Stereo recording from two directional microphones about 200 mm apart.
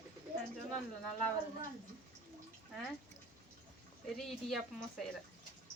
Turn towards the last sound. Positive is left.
turn(degrees=0)  # may be behind; listen again after turning